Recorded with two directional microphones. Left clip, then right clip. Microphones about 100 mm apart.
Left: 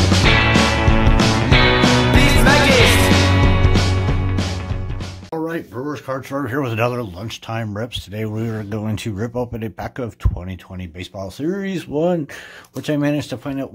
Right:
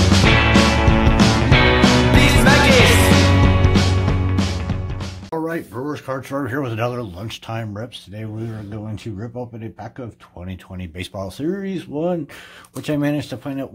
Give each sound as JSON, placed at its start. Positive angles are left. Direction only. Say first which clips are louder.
{"t": 0.0, "sound": "music", "louder": "even", "side_deg": 0}
{"t": 5.3, "sound": "a sound", "louder": "even", "side_deg": 5}
{"t": 6.6, "sound": "speech", "louder": "left 3 dB", "side_deg": 30}
{"t": 8.2, "sound": "speech", "louder": "left 6 dB", "side_deg": 55}
{"t": 11.5, "sound": "speech", "louder": "left 3 dB", "side_deg": 35}
{"t": 12.8, "sound": "speech", "louder": "left 1 dB", "side_deg": 15}